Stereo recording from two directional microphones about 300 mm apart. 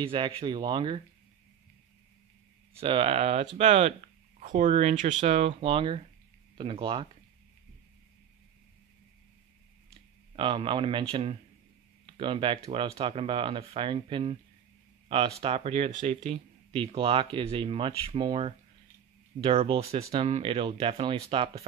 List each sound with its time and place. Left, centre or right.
0.0 s speech: centre
2.8 s speech: centre
10.3 s speech: centre